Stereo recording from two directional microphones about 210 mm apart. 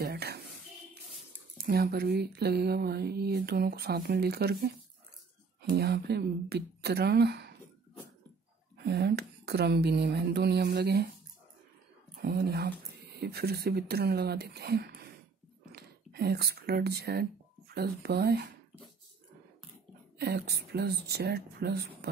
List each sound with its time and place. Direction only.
0.0 s a sound: 50° right (ahead or behind)
1.6 s speech: 45° right (ahead or behind)
8.7 s speech: 50° right (ahead or behind)
12.2 s speech: 50° right (ahead or behind)
20.2 s speech: 50° right (ahead or behind)